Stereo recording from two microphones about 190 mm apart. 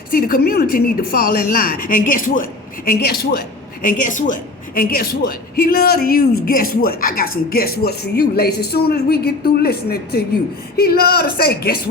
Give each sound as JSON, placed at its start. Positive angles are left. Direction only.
{"t": 0.1, "sound": "a woman's voice", "side_deg": 50}
{"t": 3.8, "sound": "a woman's voice", "side_deg": 40}